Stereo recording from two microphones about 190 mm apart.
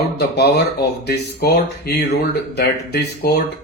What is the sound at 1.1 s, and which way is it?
Speech, 55° left (ahead or behind).